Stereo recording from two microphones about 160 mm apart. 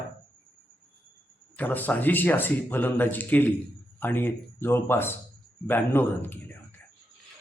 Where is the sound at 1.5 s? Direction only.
10° left (ahead or behind).